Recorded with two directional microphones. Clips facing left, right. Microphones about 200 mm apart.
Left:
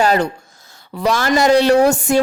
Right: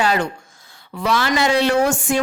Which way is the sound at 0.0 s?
40° left (ahead or behind).